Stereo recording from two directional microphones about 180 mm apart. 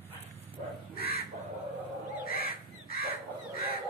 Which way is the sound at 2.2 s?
55° left (ahead or behind).